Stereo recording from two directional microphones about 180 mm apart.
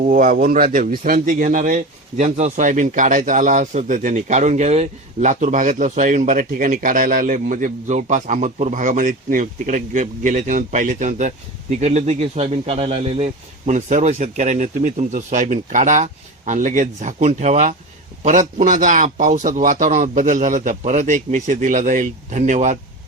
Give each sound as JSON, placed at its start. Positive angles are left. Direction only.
{"t": 0.0, "sound": "a man's voice", "side_deg": -50}